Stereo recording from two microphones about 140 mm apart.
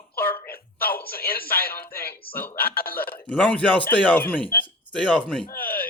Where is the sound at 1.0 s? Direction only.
90° left.